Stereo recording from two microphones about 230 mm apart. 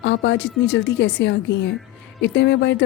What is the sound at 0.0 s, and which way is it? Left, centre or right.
Speech, left.